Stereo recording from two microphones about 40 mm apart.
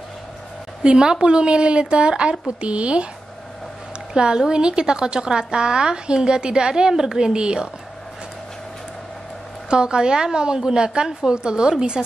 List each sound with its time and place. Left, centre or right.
0.8 s a woman's voice: right
4.1 s a woman's voice: centre
9.7 s a woman's voice: right